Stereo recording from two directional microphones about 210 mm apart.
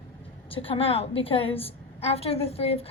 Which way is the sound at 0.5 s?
25° left (ahead or behind).